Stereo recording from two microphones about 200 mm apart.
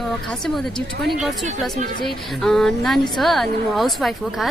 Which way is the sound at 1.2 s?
Centre (ahead or behind).